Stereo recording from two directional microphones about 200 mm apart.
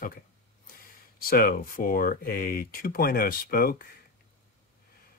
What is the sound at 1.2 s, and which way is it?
Speech, 45° left (ahead or behind).